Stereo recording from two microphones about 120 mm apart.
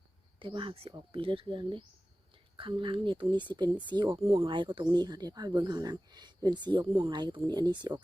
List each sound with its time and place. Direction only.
0.3 s speech: 45° right (ahead or behind)
4.2 s speech: 55° right (ahead or behind)